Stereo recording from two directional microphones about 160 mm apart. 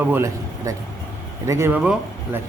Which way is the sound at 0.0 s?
15° right (ahead or behind).